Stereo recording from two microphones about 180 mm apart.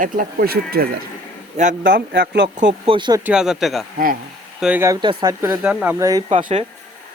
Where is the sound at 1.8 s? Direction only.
80° right.